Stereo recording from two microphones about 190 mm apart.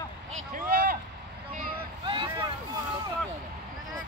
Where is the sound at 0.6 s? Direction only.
50° right (ahead or behind).